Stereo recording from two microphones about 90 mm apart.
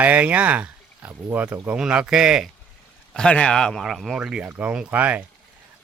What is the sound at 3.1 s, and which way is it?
Speech, 10° left (ahead or behind).